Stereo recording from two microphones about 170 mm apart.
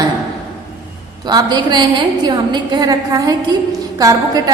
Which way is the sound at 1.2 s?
25° right (ahead or behind).